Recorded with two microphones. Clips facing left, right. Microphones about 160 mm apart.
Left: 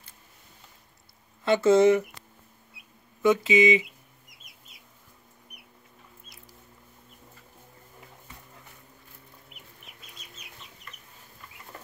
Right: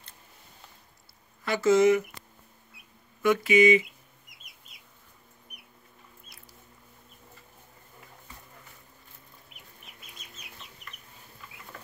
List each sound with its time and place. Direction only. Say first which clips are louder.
1.4 s speech: left 2 dB; 25° left (ahead or behind)
3.2 s speech: even; 20° left (ahead or behind)